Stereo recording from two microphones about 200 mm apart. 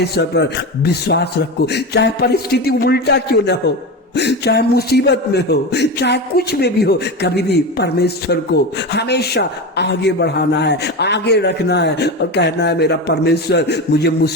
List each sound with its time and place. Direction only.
0.0 s a man's voice: 55° left (ahead or behind)